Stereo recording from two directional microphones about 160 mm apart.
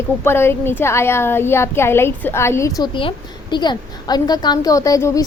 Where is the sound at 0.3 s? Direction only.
15° left (ahead or behind).